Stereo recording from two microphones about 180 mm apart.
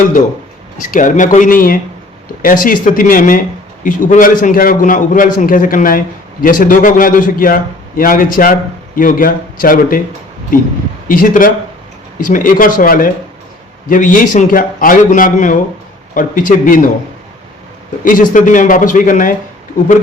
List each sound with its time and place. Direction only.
0.8 s a man's voice: 50° left (ahead or behind)
11.1 s a man's voice: 50° left (ahead or behind)
18.0 s a man's voice: 45° left (ahead or behind)